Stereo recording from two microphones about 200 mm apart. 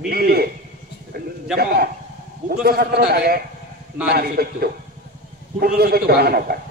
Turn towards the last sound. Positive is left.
turn(degrees=-50)  # may be behind; listen again after turning